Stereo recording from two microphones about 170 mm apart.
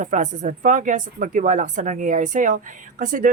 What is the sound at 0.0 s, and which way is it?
Speech, 45° right (ahead or behind).